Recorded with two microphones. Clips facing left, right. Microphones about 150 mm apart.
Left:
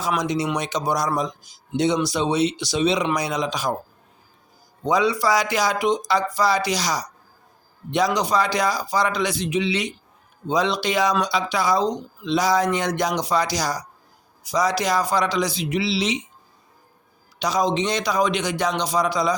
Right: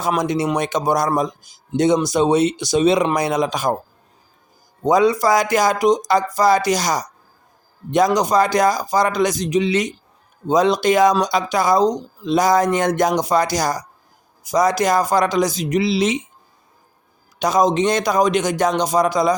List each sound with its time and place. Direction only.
0.0 s speech: 50° right (ahead or behind)
4.8 s speech: 45° right (ahead or behind)
17.4 s speech: 45° right (ahead or behind)